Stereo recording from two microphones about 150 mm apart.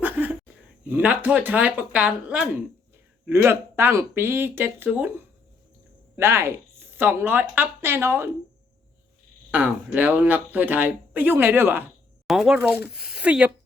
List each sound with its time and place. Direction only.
0.0 s a sound: 10° right (ahead or behind)
0.9 s speech: 10° right (ahead or behind)
9.5 s speech: 10° right (ahead or behind)
12.3 s speech: centre (ahead or behind)